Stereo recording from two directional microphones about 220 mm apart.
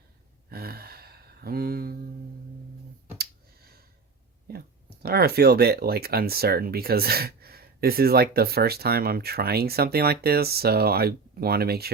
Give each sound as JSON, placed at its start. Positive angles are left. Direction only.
{"t": 0.5, "sound": "gasp", "side_deg": -45}
{"t": 3.2, "sound": "clicking", "side_deg": -45}
{"t": 4.5, "sound": "a sound", "side_deg": -45}
{"t": 5.0, "sound": "speech", "side_deg": -45}